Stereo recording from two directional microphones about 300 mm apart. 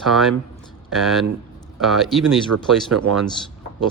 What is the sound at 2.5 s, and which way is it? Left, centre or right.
Speech, right.